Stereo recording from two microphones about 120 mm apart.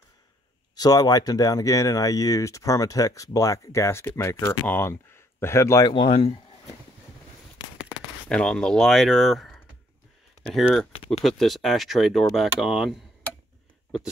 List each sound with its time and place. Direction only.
0.7 s speech: 30° left (ahead or behind)
5.9 s speech: 50° left (ahead or behind)
8.3 s speech: 5° left (ahead or behind)
10.6 s speech: 5° left (ahead or behind)